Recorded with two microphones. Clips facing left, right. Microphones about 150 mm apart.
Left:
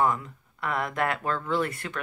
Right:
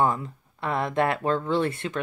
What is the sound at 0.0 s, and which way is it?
Speech, 30° right (ahead or behind).